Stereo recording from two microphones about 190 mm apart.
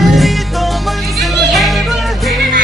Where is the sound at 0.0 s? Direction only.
Centre (ahead or behind).